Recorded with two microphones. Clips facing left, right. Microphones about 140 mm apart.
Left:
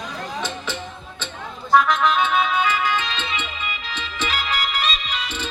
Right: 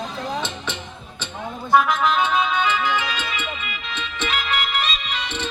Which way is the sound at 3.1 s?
25° left (ahead or behind).